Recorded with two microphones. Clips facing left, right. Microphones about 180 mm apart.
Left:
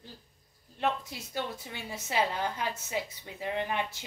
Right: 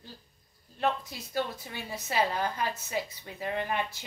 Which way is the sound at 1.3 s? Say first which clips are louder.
Right 3 dB; 20° left (ahead or behind).